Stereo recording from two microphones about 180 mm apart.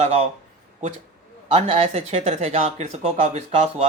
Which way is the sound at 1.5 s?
35° right (ahead or behind).